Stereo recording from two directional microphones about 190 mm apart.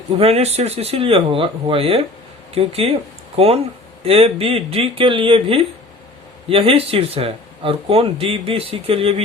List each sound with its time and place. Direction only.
0.2 s speech: 30° right (ahead or behind)